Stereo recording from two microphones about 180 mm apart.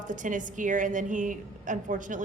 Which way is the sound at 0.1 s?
45° right (ahead or behind).